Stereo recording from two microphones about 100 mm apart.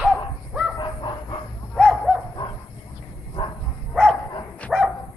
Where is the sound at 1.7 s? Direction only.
Centre (ahead or behind).